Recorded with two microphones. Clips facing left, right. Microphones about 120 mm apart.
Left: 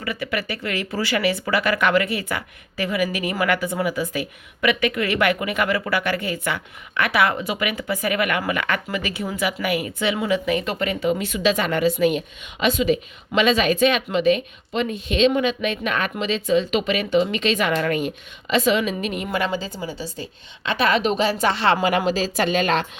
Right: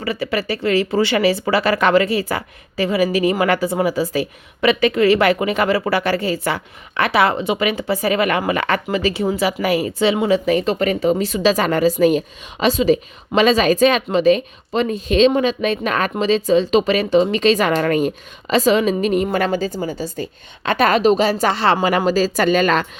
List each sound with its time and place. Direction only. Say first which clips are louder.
0.0 s a woman's voice: right 5 dB; 30° right (ahead or behind)